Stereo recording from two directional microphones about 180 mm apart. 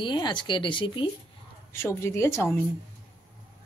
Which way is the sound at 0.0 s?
25° left (ahead or behind).